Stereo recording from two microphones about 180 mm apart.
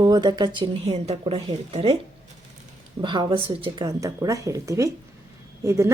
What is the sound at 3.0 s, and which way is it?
Speech, 25° right (ahead or behind).